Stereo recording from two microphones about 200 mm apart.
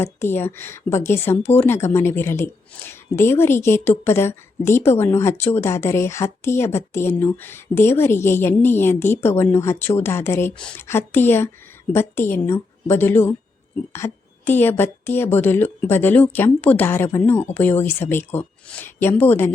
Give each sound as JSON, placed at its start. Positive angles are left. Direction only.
{"t": 0.0, "sound": "a woman's voice", "side_deg": 10}